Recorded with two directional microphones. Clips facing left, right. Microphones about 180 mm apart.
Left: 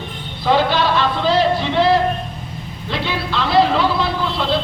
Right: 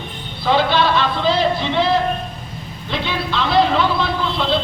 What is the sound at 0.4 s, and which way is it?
Speech, 10° left (ahead or behind).